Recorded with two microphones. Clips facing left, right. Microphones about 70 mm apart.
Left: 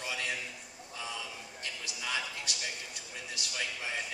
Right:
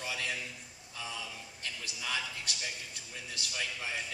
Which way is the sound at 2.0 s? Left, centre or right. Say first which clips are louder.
Left 1 dB; left.